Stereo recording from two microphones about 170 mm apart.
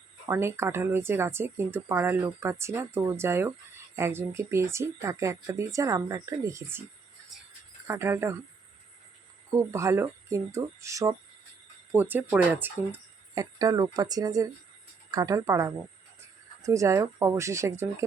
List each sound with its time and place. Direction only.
0.3 s speech: 15° right (ahead or behind)
7.9 s speech: 15° right (ahead or behind)
9.6 s speech: 15° right (ahead or behind)
13.3 s speech: 20° right (ahead or behind)